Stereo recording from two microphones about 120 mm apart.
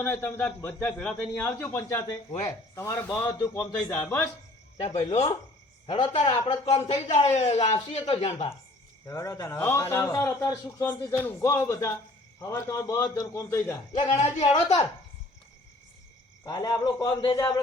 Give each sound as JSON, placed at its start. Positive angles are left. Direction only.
{"t": 0.0, "sound": "a man's voice", "side_deg": 15}
{"t": 1.4, "sound": "a man's voice", "side_deg": 20}
{"t": 4.8, "sound": "a man's voice", "side_deg": 55}
{"t": 5.8, "sound": "a man's voice", "side_deg": 45}
{"t": 9.0, "sound": "a man's voice", "side_deg": 30}
{"t": 14.1, "sound": "a man's voice", "side_deg": 80}
{"t": 14.4, "sound": "a man's voice", "side_deg": 30}
{"t": 16.5, "sound": "a man's voice", "side_deg": 35}